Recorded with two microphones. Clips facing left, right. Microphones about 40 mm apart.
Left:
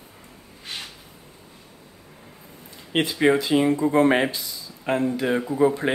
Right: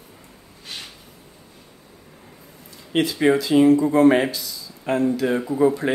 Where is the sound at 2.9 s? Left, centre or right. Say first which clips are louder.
Right 1 dB; centre.